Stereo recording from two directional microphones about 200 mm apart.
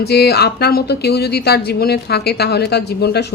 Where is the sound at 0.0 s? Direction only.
55° left (ahead or behind).